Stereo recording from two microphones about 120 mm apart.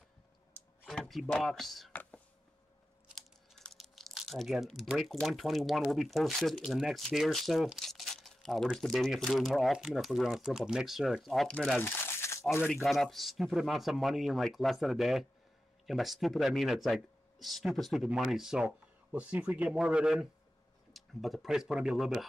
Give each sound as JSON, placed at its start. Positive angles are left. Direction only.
{"t": 0.8, "sound": "speech", "side_deg": 0}
{"t": 1.9, "sound": "a sound", "side_deg": 10}
{"t": 3.2, "sound": "speech", "side_deg": 0}
{"t": 11.8, "sound": "crumpling", "side_deg": 20}
{"t": 12.7, "sound": "speech", "side_deg": 0}